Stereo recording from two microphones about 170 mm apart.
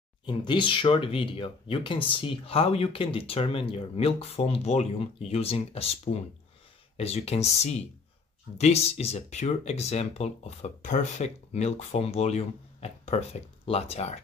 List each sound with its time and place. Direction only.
0.2 s speech: 25° left (ahead or behind)